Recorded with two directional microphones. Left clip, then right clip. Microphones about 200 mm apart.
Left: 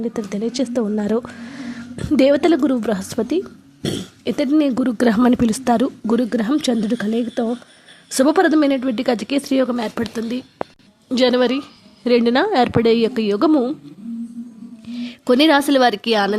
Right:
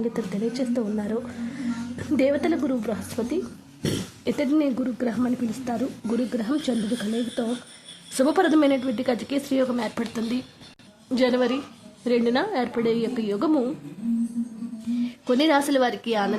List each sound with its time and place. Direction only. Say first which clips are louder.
0.1 s speech: left 4 dB; 30° left (ahead or behind)
3.8 s speech: left 4 dB; 15° left (ahead or behind)
4.3 s a woman's voice: left 6 dB; 30° left (ahead or behind)
8.1 s a woman's voice: left 6 dB; 25° left (ahead or behind)
14.9 s speech: left 7 dB; 30° left (ahead or behind)